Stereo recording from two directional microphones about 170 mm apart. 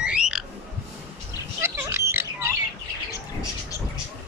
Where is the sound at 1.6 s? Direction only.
15° right (ahead or behind).